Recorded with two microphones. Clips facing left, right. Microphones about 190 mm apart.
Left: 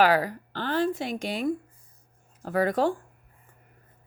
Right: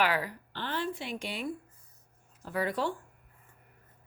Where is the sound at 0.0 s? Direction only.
40° left (ahead or behind).